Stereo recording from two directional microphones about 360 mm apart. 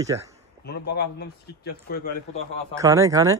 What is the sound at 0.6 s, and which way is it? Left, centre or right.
Speech, left.